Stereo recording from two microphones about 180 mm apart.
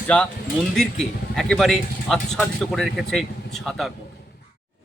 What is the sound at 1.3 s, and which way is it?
Speech, centre (ahead or behind).